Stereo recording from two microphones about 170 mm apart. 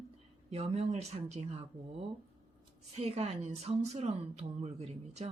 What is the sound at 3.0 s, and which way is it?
A woman's voice, 40° right (ahead or behind).